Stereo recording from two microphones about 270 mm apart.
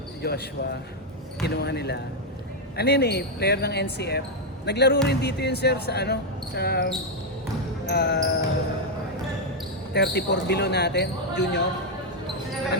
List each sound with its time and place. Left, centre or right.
0.2 s speech: left
9.9 s speech: left